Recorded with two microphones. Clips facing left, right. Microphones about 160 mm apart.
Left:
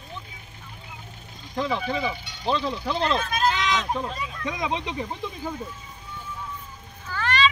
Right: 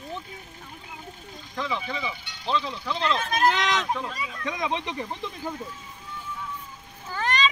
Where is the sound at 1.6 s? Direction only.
45° left (ahead or behind).